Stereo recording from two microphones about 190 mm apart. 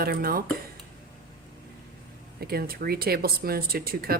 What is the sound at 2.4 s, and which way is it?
A woman's voice, 55° right (ahead or behind).